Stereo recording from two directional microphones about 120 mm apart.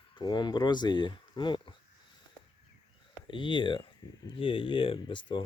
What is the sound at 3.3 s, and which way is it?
Speech, 45° left (ahead or behind).